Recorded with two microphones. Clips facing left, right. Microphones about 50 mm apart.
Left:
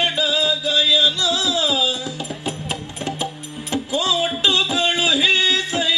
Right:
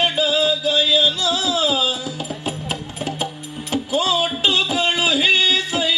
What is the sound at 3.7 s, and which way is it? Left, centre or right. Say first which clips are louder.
Music: right 1 dB; centre.